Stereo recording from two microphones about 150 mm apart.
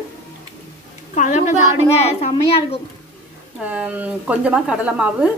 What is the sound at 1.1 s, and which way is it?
A woman's voice, 55° left (ahead or behind).